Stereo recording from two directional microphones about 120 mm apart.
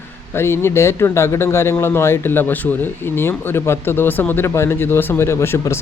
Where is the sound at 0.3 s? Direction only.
20° left (ahead or behind).